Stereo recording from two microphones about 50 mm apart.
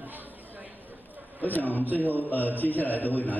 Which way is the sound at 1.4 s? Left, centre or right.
Left.